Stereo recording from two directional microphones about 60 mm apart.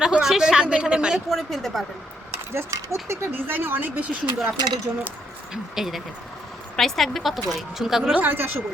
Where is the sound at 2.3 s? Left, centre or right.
Right.